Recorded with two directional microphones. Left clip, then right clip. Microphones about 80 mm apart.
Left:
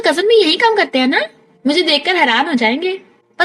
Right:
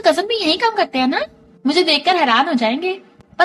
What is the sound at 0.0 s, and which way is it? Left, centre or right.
A woman's voice, left.